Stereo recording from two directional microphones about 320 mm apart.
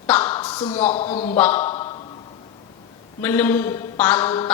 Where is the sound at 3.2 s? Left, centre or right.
Centre.